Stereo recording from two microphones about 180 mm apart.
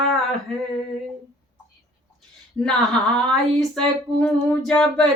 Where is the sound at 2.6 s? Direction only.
5° left (ahead or behind).